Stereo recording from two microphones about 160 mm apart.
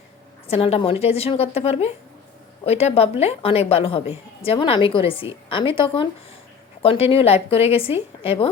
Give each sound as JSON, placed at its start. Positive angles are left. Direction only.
{"t": 0.4, "sound": "a woman's voice", "side_deg": 40}